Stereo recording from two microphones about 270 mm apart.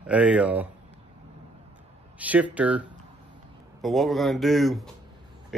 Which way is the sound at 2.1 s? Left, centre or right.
Centre.